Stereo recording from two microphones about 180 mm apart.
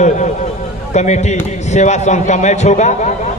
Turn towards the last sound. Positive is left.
turn(degrees=40)  # may be behind; listen again after turning